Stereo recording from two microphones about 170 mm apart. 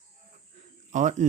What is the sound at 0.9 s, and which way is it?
Speech, 45° right (ahead or behind).